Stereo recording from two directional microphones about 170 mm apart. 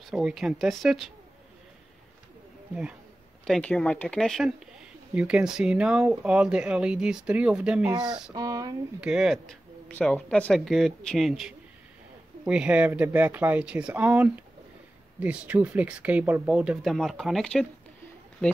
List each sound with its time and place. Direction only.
0.0 s speech: 5° right (ahead or behind)
2.7 s speech: 5° right (ahead or behind)
7.9 s speech: 25° right (ahead or behind)
9.0 s speech: 5° right (ahead or behind)